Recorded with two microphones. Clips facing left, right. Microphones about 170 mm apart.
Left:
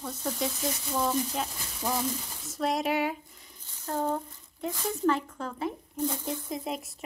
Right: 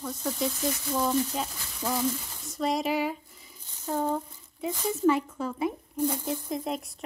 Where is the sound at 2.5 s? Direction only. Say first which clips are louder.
Right 1 dB; centre (ahead or behind).